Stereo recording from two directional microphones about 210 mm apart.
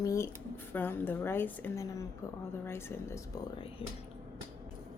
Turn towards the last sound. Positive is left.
turn(degrees=25)  # may be behind; listen again after turning